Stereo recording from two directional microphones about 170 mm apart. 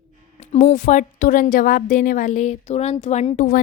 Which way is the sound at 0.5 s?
45° left (ahead or behind).